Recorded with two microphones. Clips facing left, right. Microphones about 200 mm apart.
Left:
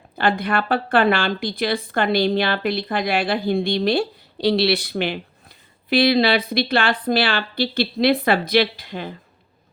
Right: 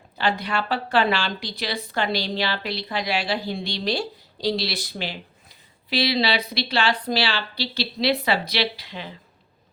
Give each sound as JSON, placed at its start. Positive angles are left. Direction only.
{"t": 0.2, "sound": "a woman's voice", "side_deg": 55}